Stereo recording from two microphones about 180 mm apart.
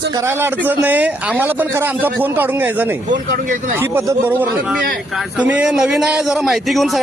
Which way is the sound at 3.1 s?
45° right (ahead or behind).